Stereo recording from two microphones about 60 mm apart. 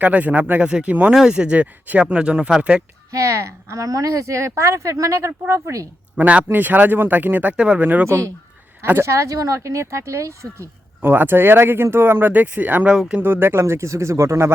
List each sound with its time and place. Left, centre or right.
0.0 s speech: right
0.7 s speech: centre
3.1 s speech: right
6.1 s speech: right
7.5 s speech: centre
7.8 s speech: right
8.0 s speech: right
9.6 s speech: right
11.0 s speech: right